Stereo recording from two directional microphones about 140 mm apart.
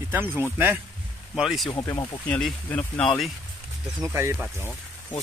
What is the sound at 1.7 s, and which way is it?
Speech, 25° left (ahead or behind).